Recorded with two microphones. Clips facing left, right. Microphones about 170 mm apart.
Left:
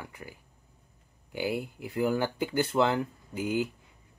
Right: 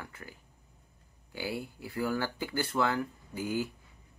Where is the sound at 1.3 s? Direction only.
15° left (ahead or behind).